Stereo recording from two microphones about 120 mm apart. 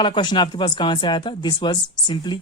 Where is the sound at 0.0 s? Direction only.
40° left (ahead or behind).